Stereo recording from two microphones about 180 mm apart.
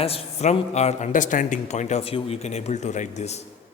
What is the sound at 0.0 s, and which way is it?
A man's voice, 35° left (ahead or behind).